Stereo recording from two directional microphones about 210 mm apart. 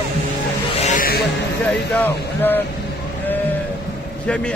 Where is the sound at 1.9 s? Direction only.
10° left (ahead or behind).